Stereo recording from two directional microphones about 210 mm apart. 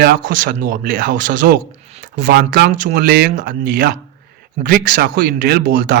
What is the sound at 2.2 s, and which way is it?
A man's voice, 55° right (ahead or behind).